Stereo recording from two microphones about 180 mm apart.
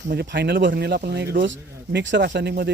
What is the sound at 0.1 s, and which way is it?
Speech, 70° right (ahead or behind).